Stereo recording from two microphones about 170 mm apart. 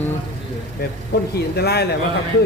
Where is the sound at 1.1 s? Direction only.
70° left (ahead or behind).